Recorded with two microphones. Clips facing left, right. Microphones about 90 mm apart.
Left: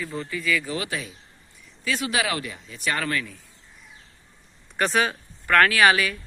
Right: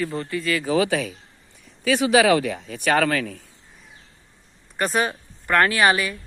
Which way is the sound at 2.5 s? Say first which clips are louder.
Right 7 dB; 75° right (ahead or behind).